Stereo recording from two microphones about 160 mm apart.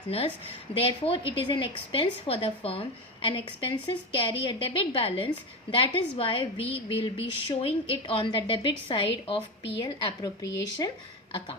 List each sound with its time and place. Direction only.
0.7 s a woman's voice: 35° left (ahead or behind)
9.8 s speech: 25° left (ahead or behind)